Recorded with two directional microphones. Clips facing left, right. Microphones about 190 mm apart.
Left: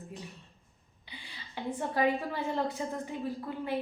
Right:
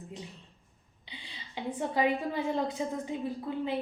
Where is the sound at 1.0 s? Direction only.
15° right (ahead or behind).